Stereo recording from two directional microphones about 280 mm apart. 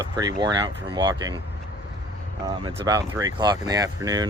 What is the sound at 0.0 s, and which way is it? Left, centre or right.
Speech, centre.